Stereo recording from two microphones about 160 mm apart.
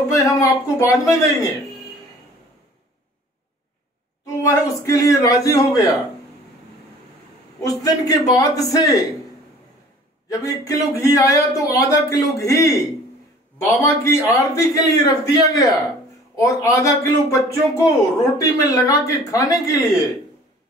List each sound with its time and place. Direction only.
0.2 s speech: 20° left (ahead or behind)
4.4 s speech: 20° left (ahead or behind)
7.6 s speech: 25° left (ahead or behind)
10.3 s speech: 20° left (ahead or behind)